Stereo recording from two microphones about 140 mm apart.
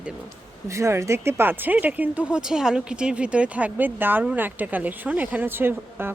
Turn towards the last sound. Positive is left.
turn(degrees=-15)  # may be behind; listen again after turning